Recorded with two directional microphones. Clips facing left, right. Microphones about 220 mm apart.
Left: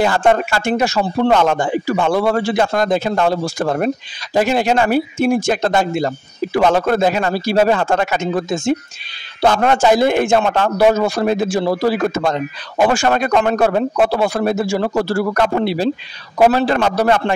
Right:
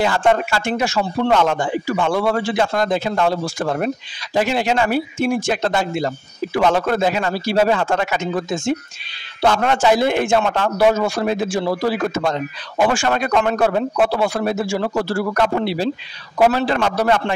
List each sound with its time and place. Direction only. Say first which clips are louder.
0.0 s speech: left 2 dB; 45° left (ahead or behind)